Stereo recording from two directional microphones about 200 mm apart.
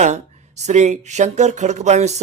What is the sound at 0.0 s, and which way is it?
Speech, 35° right (ahead or behind).